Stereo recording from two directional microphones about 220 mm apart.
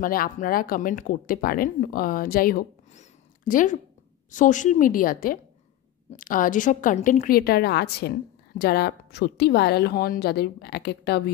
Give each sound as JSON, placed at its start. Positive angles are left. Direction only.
{"t": 0.0, "sound": "a woman's voice", "side_deg": 40}